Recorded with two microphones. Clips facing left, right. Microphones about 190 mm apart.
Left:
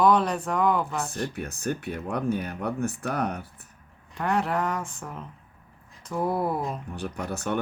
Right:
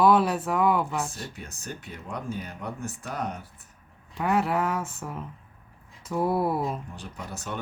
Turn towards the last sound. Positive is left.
turn(degrees=60)  # may be behind; listen again after turning